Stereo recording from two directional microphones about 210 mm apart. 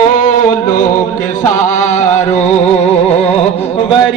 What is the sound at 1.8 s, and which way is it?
Chant, 35° left (ahead or behind).